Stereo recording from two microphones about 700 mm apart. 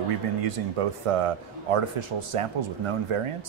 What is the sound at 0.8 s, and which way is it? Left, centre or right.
A man's voice, right.